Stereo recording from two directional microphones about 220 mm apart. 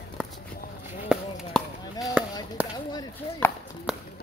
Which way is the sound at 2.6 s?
5° right (ahead or behind).